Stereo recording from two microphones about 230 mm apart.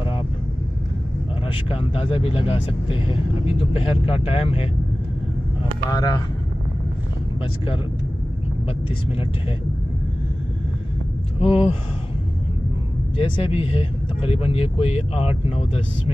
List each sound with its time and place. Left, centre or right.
1.5 s speech: left
5.9 s speech: centre
8.6 s speech: left
11.3 s speech: left
13.2 s speech: left